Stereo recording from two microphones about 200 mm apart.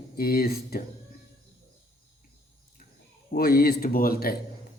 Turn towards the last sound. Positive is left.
turn(degrees=50)  # may be behind; listen again after turning